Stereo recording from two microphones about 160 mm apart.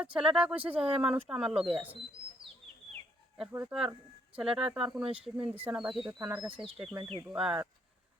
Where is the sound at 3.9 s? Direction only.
5° right (ahead or behind).